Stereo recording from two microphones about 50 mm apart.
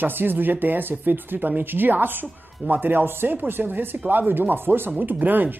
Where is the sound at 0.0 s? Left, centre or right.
Right.